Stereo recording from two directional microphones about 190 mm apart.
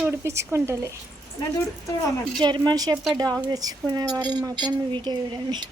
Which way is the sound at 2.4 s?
20° right (ahead or behind).